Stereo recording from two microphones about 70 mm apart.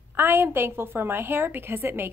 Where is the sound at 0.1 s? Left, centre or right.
Right.